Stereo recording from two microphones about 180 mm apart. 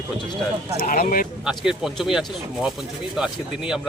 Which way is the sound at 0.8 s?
50° left (ahead or behind).